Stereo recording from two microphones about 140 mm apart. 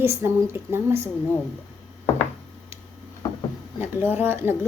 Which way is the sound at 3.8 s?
15° right (ahead or behind).